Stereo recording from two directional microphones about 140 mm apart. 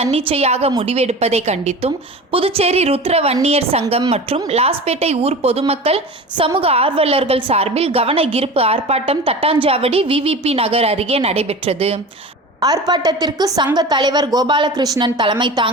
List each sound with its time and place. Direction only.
0.0 s a woman's voice: 45° right (ahead or behind)
12.5 s a woman's voice: 25° right (ahead or behind)